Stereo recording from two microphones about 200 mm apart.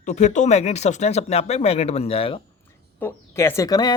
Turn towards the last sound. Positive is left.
turn(degrees=20)  # may be behind; listen again after turning